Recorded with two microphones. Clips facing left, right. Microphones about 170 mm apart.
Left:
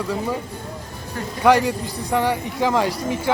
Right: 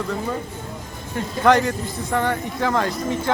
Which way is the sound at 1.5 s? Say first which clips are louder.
Left 1 dB; 10° left (ahead or behind).